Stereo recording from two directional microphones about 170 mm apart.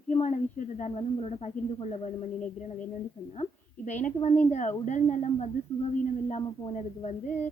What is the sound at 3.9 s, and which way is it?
A woman's voice, 45° left (ahead or behind).